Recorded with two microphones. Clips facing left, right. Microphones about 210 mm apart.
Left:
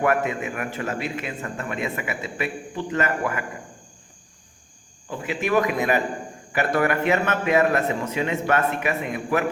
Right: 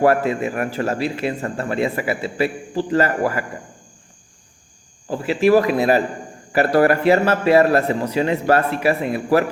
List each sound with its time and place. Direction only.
0.0 s a man's voice: 35° right (ahead or behind)
5.0 s a man's voice: 35° right (ahead or behind)